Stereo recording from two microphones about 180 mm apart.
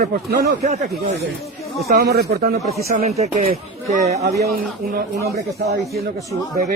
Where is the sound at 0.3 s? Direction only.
60° right (ahead or behind).